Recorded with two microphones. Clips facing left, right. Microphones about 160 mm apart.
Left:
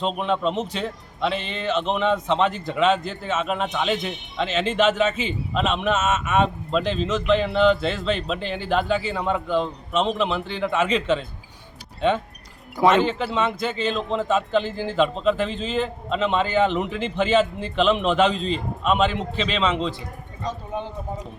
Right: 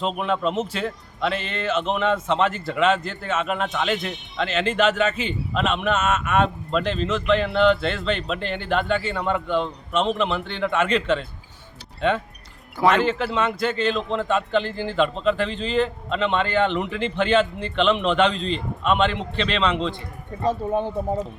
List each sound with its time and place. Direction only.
0.0 s a man's voice: 5° right (ahead or behind)
12.9 s a man's voice: centre (ahead or behind)
20.4 s speech: 55° right (ahead or behind)